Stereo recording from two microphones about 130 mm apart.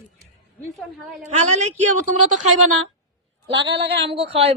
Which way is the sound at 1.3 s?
60° right (ahead or behind).